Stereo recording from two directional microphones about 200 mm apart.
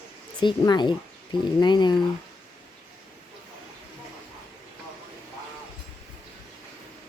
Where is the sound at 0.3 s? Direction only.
20° left (ahead or behind).